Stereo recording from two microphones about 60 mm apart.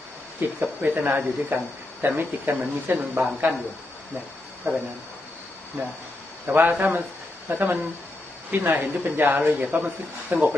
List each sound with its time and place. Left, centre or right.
0.3 s speech: right
5.8 s speech: right